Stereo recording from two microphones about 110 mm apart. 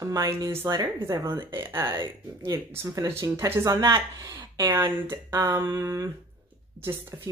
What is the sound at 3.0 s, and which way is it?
Speech, 25° right (ahead or behind).